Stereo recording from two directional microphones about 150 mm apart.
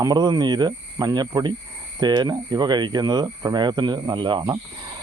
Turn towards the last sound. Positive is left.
turn(degrees=-30)  # may be behind; listen again after turning